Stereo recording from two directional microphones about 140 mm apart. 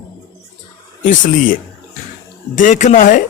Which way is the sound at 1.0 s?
75° left (ahead or behind).